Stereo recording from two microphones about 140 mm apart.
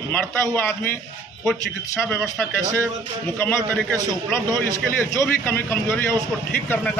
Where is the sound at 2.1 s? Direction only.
10° left (ahead or behind).